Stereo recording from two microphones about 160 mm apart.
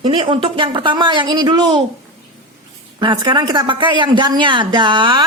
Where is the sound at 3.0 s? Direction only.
30° right (ahead or behind).